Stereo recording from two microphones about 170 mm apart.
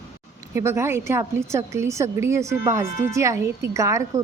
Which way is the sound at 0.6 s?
15° right (ahead or behind).